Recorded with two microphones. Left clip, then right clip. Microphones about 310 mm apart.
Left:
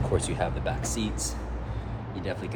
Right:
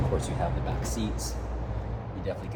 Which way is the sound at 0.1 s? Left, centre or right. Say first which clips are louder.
Left 4 dB; left.